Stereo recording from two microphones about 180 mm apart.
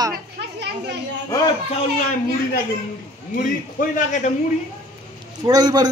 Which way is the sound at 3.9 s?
45° left (ahead or behind).